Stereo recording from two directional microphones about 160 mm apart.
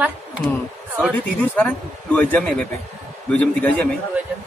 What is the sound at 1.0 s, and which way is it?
Speech, 10° left (ahead or behind).